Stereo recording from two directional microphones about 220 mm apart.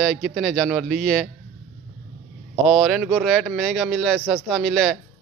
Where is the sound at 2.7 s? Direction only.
Centre (ahead or behind).